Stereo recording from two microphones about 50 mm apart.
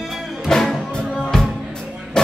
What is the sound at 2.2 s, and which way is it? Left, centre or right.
Music, centre.